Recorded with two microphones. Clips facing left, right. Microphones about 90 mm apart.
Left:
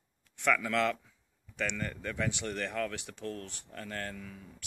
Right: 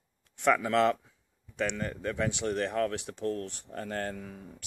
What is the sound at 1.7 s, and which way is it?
Speech, 15° right (ahead or behind).